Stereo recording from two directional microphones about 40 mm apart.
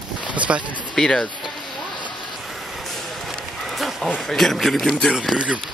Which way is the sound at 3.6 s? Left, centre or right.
Centre.